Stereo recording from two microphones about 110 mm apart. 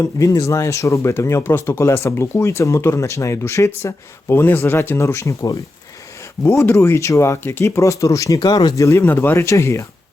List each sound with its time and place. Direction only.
0.0 s speech: 30° left (ahead or behind)